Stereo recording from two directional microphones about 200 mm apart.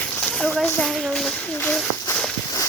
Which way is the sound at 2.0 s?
15° left (ahead or behind).